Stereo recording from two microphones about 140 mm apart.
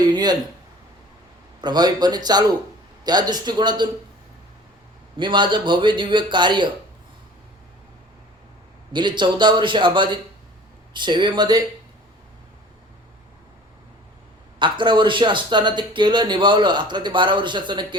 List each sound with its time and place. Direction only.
0.1 s speech: 30° right (ahead or behind)
1.6 s a man's voice: 30° right (ahead or behind)
5.1 s speech: 35° right (ahead or behind)
8.9 s speech: 35° right (ahead or behind)
14.6 s speech: 35° right (ahead or behind)